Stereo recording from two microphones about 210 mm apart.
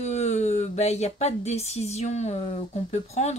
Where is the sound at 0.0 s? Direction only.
30° left (ahead or behind).